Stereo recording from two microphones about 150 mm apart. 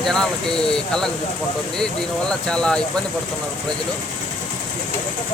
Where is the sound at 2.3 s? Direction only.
5° left (ahead or behind).